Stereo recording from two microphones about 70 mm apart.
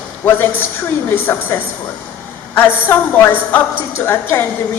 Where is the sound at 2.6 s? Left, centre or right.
Left.